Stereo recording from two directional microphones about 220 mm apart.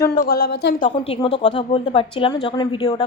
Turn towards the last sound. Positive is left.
turn(degrees=20)  # may be behind; listen again after turning